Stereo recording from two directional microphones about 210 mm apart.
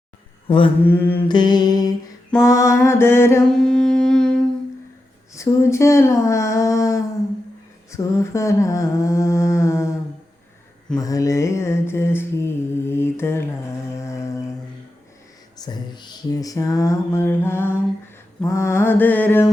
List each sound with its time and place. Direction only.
0.4 s mantra: 25° left (ahead or behind)
0.8 s mantra: 10° left (ahead or behind)
1.3 s mantra: 20° left (ahead or behind); by 4.4 s 5° left (ahead or behind)
5.3 s mantra: 15° left (ahead or behind)
10.9 s mantra: 15° left (ahead or behind)
13.9 s music: 15° left (ahead or behind)
15.6 s mantra: 20° left (ahead or behind)